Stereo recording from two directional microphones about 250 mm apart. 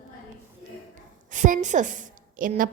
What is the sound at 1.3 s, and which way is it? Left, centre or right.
A woman's voice, right.